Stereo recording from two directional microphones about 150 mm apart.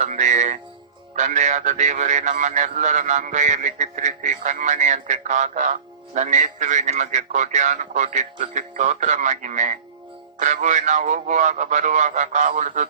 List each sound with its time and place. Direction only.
0.0 s music: 55° right (ahead or behind)
1.1 s speech: 55° right (ahead or behind)